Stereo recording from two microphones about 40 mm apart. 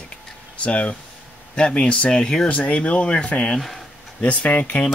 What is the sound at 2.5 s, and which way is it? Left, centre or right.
Speech, left.